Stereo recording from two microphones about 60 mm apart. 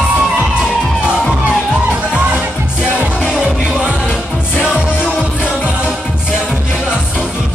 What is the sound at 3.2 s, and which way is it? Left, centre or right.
Music, centre.